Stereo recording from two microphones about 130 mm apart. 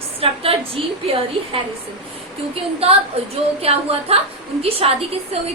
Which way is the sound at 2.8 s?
50° right (ahead or behind).